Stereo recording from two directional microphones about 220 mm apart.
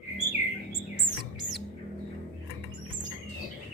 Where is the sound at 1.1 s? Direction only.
35° right (ahead or behind).